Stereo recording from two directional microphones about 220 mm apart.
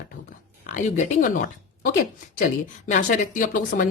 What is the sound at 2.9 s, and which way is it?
Speech, 35° left (ahead or behind).